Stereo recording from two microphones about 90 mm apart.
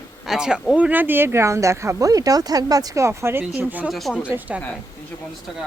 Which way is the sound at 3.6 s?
20° right (ahead or behind).